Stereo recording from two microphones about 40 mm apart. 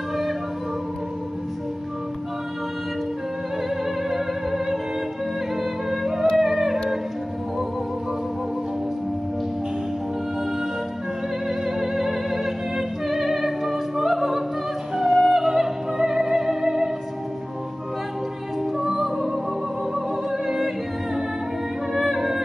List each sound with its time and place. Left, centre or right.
4.1 s music: centre
11.4 s music: centre
18.8 s music: centre